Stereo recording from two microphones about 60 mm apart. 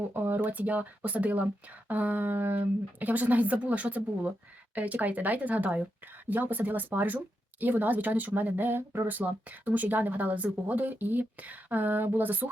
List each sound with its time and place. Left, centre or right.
0.1 s speech: right
9.1 s speech: right